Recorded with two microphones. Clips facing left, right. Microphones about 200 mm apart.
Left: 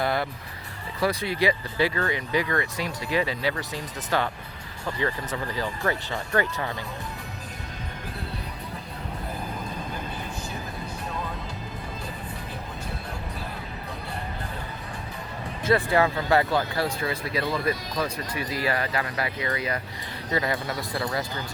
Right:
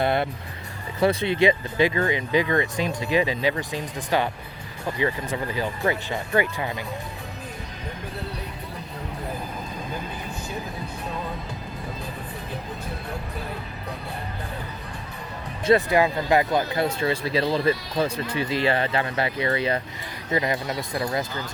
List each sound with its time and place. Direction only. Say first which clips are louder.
0.0 s music: right 3 dB; 25° right (ahead or behind)
0.9 s speech: right 5 dB; 25° right (ahead or behind)
15.6 s speech: right 3 dB; 20° right (ahead or behind)
20.3 s speech: right 2 dB; 20° right (ahead or behind)